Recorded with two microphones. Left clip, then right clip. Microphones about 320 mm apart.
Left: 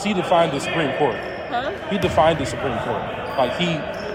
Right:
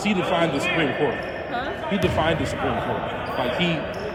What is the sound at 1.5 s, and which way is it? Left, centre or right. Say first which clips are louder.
Basketball bounce: left 3 dB; left.